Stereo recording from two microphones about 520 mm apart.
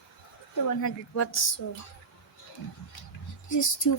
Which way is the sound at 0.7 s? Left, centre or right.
Left.